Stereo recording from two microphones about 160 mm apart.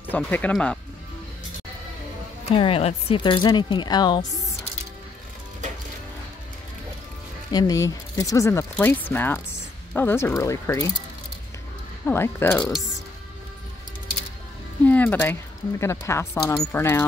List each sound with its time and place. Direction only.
0.1 s speech: 10° left (ahead or behind)
2.5 s speech: 35° left (ahead or behind)
7.5 s speech: 25° left (ahead or behind)
12.1 s speech: 15° left (ahead or behind)
12.5 s speech: 5° left (ahead or behind)
14.9 s speech: 10° left (ahead or behind)